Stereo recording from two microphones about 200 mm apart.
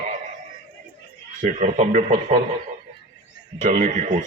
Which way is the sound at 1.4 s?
40° right (ahead or behind).